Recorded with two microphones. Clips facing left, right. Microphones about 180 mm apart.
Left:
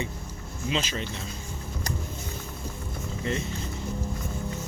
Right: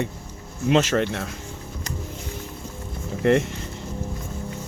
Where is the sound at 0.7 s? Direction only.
65° right (ahead or behind).